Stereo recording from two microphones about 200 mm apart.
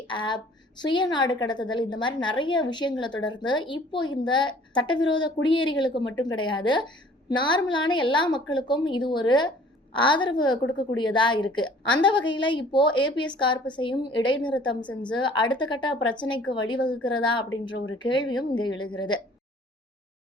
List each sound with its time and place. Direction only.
0.1 s a woman's voice: 25° left (ahead or behind)